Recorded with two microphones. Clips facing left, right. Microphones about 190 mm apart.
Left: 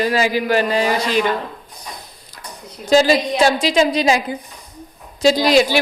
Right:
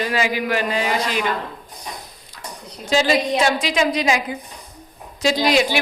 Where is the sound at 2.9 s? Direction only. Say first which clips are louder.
Left 4 dB; 40° left (ahead or behind).